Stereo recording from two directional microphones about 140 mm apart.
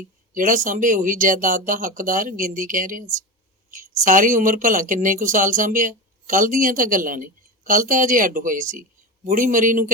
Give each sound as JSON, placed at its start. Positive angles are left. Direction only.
{"t": 0.3, "sound": "a woman's voice", "side_deg": -70}